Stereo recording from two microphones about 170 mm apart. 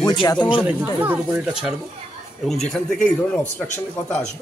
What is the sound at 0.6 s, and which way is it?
Speech, 10° right (ahead or behind).